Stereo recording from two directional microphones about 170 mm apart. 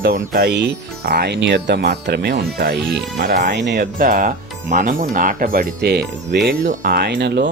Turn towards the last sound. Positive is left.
turn(degrees=-85)